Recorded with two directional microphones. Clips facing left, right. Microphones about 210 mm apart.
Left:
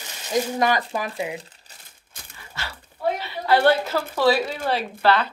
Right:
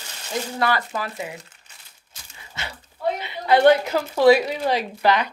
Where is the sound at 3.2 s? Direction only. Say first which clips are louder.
Right 3 dB; 20° right (ahead or behind).